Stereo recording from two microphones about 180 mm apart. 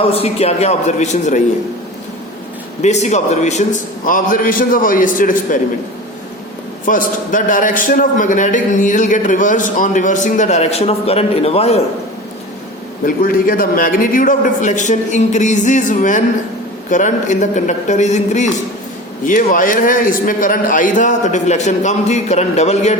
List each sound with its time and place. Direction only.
0.1 s a man's voice: 35° left (ahead or behind)
2.8 s a man's voice: 40° left (ahead or behind)
6.8 s a man's voice: 50° left (ahead or behind)
13.1 s a man's voice: 55° left (ahead or behind)